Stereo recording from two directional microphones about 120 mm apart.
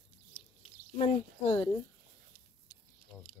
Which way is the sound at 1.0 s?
60° left (ahead or behind).